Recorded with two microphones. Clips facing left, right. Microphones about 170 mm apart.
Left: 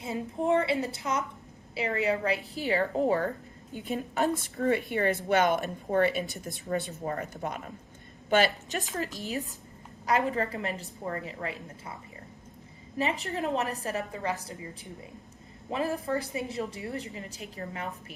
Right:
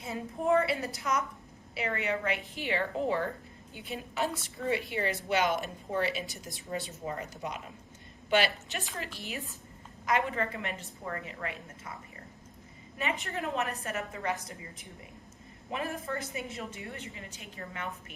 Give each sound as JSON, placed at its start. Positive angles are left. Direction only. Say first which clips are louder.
{"t": 0.0, "sound": "a woman's voice", "louder": "left 3 dB", "side_deg": 30}
{"t": 8.7, "sound": "a woman's voice", "louder": "left 6 dB", "side_deg": 40}
{"t": 13.0, "sound": "a woman's voice", "louder": "left 4 dB", "side_deg": 35}